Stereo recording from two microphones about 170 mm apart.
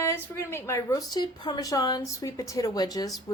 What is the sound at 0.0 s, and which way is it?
A woman's voice, 15° left (ahead or behind).